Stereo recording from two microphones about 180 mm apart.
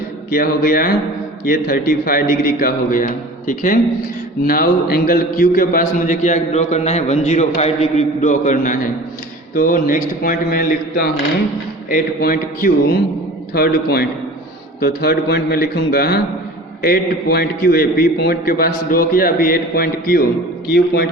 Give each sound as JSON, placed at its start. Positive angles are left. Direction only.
{"t": 0.3, "sound": "a man's voice", "side_deg": 55}